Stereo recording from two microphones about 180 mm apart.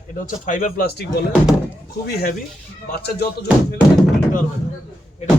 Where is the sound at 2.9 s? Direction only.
65° left (ahead or behind).